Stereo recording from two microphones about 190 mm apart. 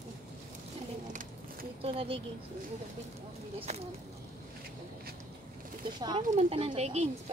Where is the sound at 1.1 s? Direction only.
45° right (ahead or behind).